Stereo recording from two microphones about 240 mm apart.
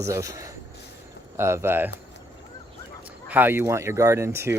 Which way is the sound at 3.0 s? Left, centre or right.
Centre.